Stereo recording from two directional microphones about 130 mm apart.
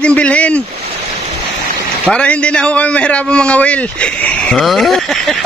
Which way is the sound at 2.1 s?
10° left (ahead or behind).